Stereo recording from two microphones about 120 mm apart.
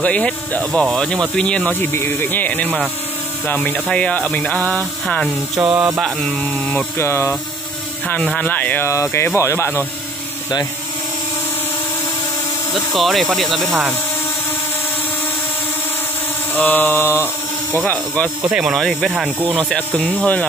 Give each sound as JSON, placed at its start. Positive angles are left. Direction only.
{"t": 0.0, "sound": "speech", "side_deg": 10}
{"t": 1.8, "sound": "speech", "side_deg": 20}
{"t": 5.0, "sound": "speech", "side_deg": 5}
{"t": 5.6, "sound": "speech", "side_deg": -10}
{"t": 5.9, "sound": "speech", "side_deg": 0}
{"t": 7.0, "sound": "speech", "side_deg": 20}
{"t": 12.9, "sound": "speech", "side_deg": 0}
{"t": 16.5, "sound": "speech", "side_deg": 15}
{"t": 18.5, "sound": "speech", "side_deg": -5}
{"t": 19.7, "sound": "speech", "side_deg": 10}